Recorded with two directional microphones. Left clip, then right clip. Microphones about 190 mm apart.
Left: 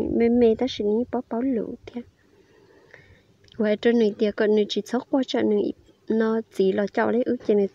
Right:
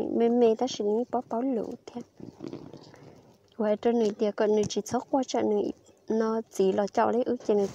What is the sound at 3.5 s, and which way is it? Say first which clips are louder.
Speech: left 5 dB; 20° left (ahead or behind).